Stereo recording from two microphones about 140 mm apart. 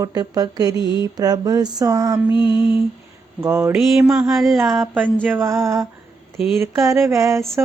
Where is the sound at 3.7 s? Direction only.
5° right (ahead or behind).